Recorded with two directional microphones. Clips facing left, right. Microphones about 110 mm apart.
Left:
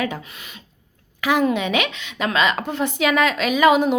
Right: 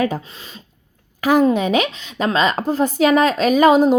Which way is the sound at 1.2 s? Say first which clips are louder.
Right 4 dB; 40° right (ahead or behind).